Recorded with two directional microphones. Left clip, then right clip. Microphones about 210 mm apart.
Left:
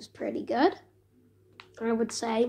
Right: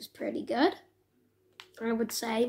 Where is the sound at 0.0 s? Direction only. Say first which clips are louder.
Left 2 dB; 35° right (ahead or behind).